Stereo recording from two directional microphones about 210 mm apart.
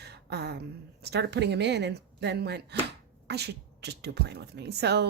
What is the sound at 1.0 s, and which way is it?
Speech, 50° right (ahead or behind).